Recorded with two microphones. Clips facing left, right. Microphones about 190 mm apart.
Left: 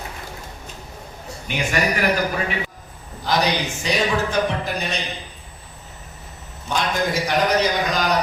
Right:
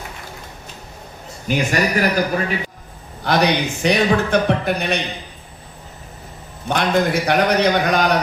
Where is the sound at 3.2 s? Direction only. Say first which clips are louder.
Right 4 dB; 60° right (ahead or behind).